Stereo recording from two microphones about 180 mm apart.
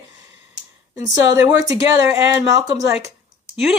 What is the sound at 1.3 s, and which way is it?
Speech, 20° right (ahead or behind).